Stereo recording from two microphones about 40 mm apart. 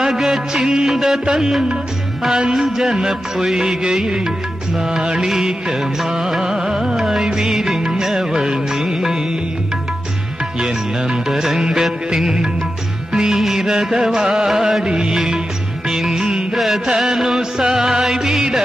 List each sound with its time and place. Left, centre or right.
0.0 s music: centre
5.2 s music: centre
11.2 s music: centre
16.5 s carnatic music: centre
16.8 s music: centre